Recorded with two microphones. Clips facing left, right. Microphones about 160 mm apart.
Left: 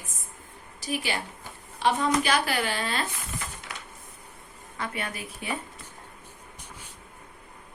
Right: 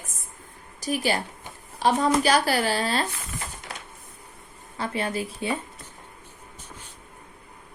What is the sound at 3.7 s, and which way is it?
Printer, 30° right (ahead or behind).